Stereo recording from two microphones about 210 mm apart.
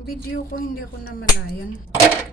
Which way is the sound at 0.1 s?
40° left (ahead or behind).